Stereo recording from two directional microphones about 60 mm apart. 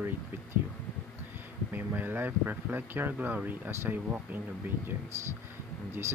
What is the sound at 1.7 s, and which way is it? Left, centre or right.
Speech, right.